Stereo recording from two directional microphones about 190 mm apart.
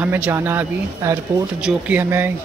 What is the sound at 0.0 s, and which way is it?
Speech, 10° right (ahead or behind).